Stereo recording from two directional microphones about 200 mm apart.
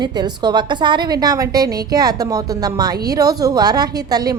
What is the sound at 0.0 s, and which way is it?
A woman's voice, 20° right (ahead or behind).